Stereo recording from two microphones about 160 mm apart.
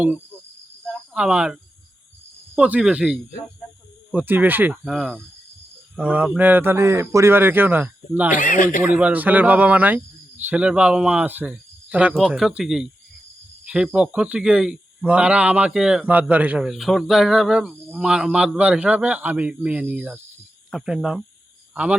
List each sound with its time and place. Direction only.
0.9 s cricket: 5° right (ahead or behind)
2.6 s speech: 10° right (ahead or behind)
8.3 s speech: 55° left (ahead or behind)
8.8 s speech: 10° right (ahead or behind)